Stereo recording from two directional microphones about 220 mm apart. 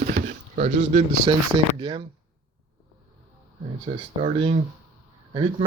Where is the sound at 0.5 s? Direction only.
35° right (ahead or behind).